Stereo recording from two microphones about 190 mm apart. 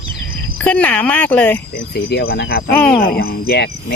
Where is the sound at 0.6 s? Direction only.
5° left (ahead or behind).